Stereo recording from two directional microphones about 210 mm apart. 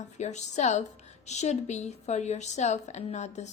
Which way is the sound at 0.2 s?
35° left (ahead or behind).